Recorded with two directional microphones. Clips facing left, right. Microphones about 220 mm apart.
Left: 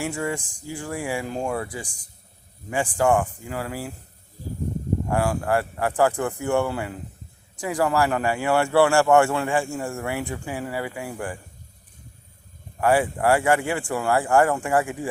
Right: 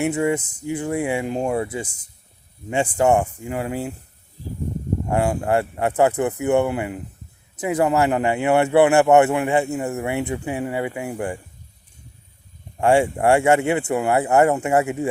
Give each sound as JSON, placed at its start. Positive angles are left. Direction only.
{"t": 0.0, "sound": "speech", "side_deg": -20}
{"t": 5.0, "sound": "speech", "side_deg": -20}
{"t": 12.8, "sound": "speech", "side_deg": -25}